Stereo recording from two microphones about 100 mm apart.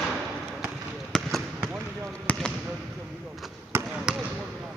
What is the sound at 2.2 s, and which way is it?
Basketball bounce, 5° left (ahead or behind).